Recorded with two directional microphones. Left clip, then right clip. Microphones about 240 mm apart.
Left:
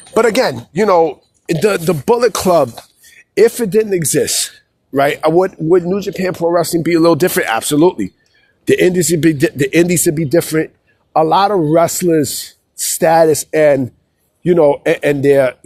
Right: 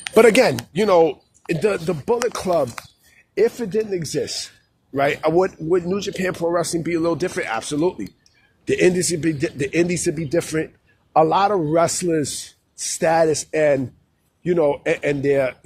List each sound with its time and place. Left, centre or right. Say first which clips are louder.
0.1 s speech: left 1 dB; centre
1.5 s music: left 7 dB; left
4.9 s speech: left 6 dB; left